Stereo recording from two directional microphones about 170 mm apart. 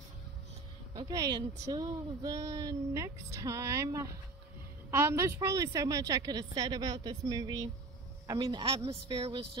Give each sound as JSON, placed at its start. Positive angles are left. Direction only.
{"t": 0.9, "sound": "a woman's voice", "side_deg": -20}